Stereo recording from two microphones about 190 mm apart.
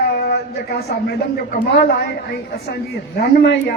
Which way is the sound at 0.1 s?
60° left (ahead or behind).